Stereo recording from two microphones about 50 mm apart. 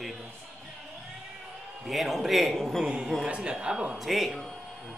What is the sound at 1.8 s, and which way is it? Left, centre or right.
A man's voice, centre.